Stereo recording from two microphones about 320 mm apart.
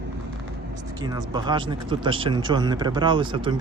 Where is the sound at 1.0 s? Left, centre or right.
Centre.